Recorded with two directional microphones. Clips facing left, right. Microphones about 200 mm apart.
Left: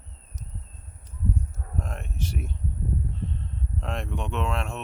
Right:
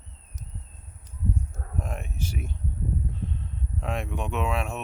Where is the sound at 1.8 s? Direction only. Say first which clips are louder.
Even; 5° right (ahead or behind).